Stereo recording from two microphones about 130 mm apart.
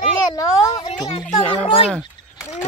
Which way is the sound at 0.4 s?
25° left (ahead or behind).